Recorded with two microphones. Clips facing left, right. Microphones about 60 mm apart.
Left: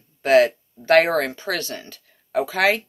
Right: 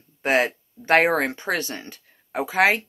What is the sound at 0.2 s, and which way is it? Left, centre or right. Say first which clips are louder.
Speech: left 6 dB; right.